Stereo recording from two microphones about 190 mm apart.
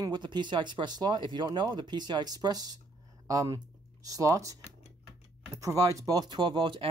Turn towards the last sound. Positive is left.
turn(degrees=-25)  # may be behind; listen again after turning